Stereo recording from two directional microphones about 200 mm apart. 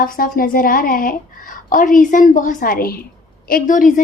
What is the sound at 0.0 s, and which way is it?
A woman's voice, 45° left (ahead or behind).